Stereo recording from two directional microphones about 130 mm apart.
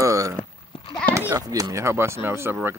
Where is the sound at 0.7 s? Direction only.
45° left (ahead or behind).